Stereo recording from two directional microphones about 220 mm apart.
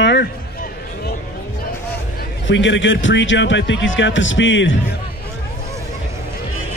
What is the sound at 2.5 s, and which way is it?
A man's voice, 55° left (ahead or behind).